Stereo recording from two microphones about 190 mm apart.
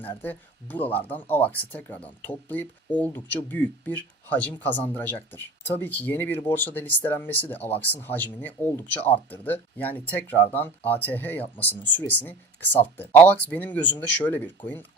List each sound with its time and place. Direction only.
0.0 s speech: 10° left (ahead or behind)